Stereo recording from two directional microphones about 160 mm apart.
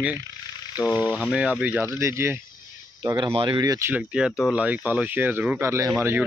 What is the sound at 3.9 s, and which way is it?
Speech, 5° right (ahead or behind).